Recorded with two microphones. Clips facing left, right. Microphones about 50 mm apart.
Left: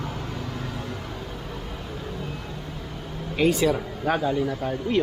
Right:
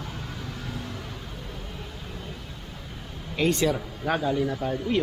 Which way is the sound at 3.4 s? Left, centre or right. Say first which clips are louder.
Left 3 dB; centre.